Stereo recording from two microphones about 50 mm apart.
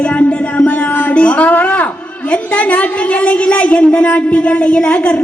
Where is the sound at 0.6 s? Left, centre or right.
Left.